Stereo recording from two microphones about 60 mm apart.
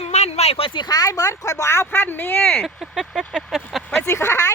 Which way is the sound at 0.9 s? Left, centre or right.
Left.